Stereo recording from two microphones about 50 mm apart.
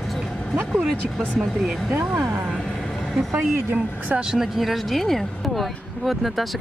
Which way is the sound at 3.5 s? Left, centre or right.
Right.